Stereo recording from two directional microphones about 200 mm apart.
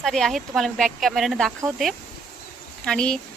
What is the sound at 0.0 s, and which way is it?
Speech, centre (ahead or behind).